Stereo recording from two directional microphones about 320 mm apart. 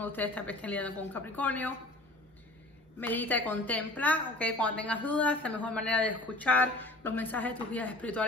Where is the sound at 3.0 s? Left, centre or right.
Centre.